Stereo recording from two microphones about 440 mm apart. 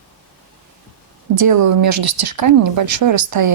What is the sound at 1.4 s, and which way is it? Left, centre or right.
Speech, right.